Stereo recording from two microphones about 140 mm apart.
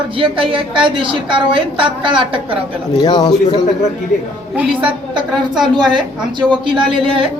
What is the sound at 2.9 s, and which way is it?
Speech, 30° left (ahead or behind).